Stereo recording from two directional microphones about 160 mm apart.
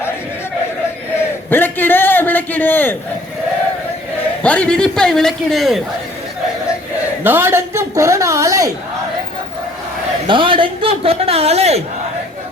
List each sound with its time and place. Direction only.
1.5 s a man's voice: 10° left (ahead or behind)
4.4 s speech: 5° left (ahead or behind)
7.3 s a woman's voice: 15° right (ahead or behind)
10.2 s a man's voice: 30° right (ahead or behind)